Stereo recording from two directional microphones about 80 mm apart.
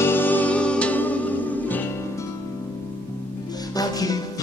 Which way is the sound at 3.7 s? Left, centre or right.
Left.